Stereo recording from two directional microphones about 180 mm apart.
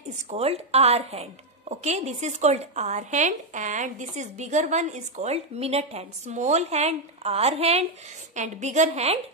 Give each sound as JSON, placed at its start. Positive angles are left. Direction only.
{"t": 0.3, "sound": "a woman's voice", "side_deg": -35}